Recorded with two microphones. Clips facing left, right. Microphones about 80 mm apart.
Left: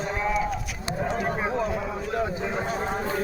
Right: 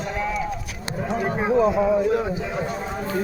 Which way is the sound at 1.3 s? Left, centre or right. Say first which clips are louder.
Right 8 dB; centre.